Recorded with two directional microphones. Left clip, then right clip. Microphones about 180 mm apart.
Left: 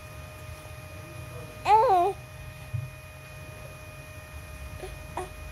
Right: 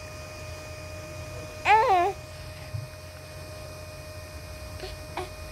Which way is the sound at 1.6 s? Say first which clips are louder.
Even; 20° left (ahead or behind).